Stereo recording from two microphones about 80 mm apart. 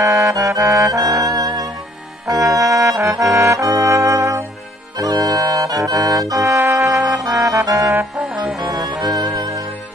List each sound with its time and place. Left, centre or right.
0.0 s music: right
2.2 s trombone: right
4.9 s music: right
8.2 s music: centre
8.7 s music: right